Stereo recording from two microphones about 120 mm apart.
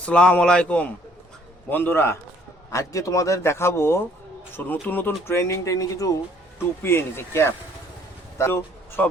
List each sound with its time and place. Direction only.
0.0 s a man's voice: 10° left (ahead or behind)